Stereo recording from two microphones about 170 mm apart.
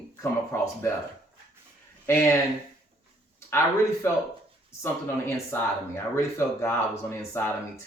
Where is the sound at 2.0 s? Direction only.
15° left (ahead or behind).